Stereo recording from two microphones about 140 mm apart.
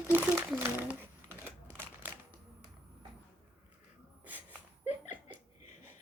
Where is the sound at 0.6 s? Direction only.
15° right (ahead or behind).